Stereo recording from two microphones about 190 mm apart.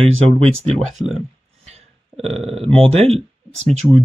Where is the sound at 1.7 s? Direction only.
35° right (ahead or behind).